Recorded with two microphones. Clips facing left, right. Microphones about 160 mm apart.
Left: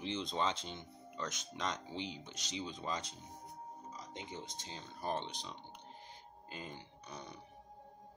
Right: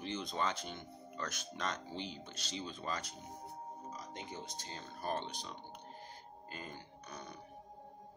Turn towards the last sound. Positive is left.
turn(degrees=20)  # may be behind; listen again after turning